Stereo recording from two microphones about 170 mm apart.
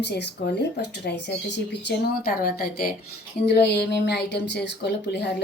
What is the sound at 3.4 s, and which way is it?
A woman's voice, 80° left.